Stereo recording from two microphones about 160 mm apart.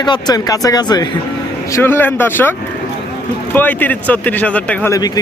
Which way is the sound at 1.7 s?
15° left (ahead or behind).